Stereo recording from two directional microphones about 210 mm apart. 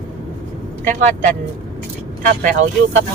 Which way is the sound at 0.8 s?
40° right (ahead or behind).